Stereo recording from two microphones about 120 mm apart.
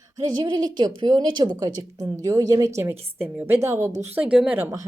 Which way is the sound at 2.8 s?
20° right (ahead or behind).